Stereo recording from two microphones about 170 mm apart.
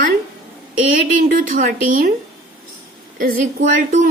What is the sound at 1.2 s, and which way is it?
Speech, 55° right (ahead or behind).